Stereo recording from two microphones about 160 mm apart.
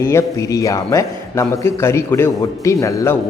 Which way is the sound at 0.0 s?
15° left (ahead or behind).